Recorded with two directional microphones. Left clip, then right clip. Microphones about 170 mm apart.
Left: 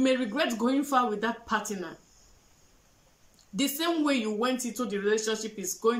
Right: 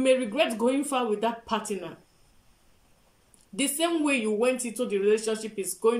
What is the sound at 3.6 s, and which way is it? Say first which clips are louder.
Speech: right 2 dB; 20° right (ahead or behind).